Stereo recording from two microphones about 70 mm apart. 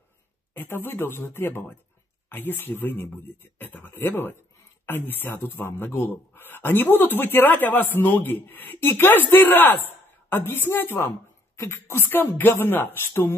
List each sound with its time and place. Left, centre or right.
0.6 s speech: left